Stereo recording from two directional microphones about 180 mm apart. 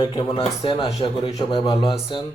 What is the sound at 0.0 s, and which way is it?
A man's voice, 30° left (ahead or behind).